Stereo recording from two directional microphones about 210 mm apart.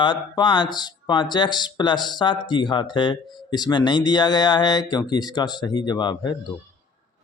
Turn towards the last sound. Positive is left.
turn(degrees=20)  # may be behind; listen again after turning